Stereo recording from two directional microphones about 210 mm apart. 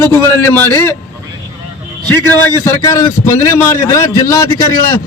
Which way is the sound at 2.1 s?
10° left (ahead or behind).